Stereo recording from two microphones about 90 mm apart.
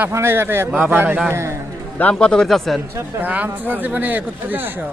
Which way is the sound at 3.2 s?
20° right (ahead or behind).